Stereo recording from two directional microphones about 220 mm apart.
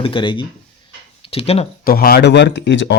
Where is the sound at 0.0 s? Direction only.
25° left (ahead or behind).